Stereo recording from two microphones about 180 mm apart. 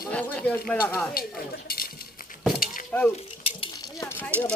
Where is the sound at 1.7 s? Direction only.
55° left (ahead or behind).